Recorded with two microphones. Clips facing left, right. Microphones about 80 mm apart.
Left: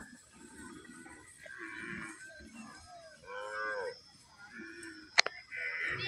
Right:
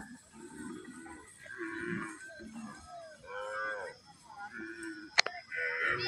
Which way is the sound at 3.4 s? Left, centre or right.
Centre.